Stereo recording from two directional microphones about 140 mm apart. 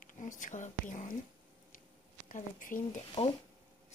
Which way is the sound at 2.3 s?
70° left (ahead or behind).